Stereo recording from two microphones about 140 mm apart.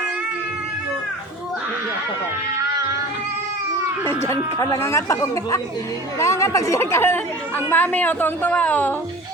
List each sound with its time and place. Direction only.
4.5 s a woman's voice: 25° left (ahead or behind)